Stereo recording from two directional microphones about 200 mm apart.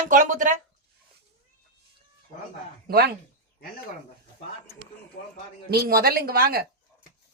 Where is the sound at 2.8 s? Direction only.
50° right (ahead or behind).